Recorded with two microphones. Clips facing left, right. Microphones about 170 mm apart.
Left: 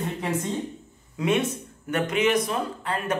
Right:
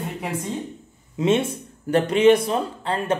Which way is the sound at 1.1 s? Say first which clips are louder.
Right 4 dB; 25° right (ahead or behind).